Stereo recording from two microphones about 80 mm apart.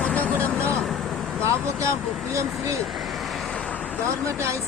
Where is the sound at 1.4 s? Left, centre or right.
Right.